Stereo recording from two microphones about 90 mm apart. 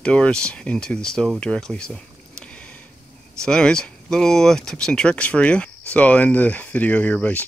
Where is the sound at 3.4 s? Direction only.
10° left (ahead or behind).